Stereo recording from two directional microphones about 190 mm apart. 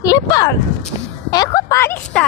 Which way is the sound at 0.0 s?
20° left (ahead or behind).